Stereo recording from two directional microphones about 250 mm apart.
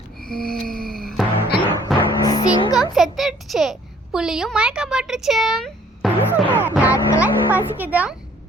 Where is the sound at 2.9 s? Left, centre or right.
Centre.